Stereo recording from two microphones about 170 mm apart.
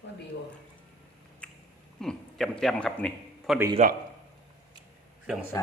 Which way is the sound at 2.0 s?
5° left (ahead or behind).